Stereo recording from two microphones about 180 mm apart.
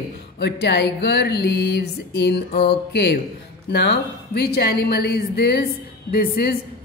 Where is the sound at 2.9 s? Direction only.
65° left (ahead or behind).